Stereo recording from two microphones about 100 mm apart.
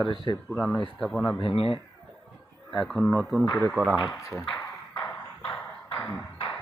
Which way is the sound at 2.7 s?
Centre (ahead or behind).